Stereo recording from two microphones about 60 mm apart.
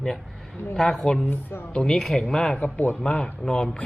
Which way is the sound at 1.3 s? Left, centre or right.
Left.